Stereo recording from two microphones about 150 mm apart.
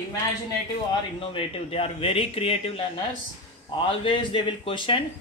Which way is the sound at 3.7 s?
35° left (ahead or behind).